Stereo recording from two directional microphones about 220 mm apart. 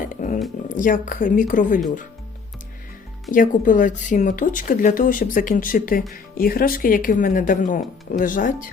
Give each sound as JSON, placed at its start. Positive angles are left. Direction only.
{"t": 0.0, "sound": "music", "side_deg": 35}
{"t": 0.8, "sound": "speech", "side_deg": 35}
{"t": 3.3, "sound": "speech", "side_deg": 35}